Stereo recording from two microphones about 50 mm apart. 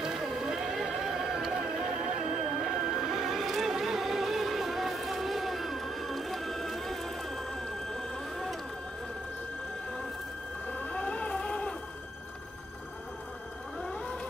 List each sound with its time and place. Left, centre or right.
0.0 s music: centre
10.7 s cat: left
13.7 s whale vocalization: centre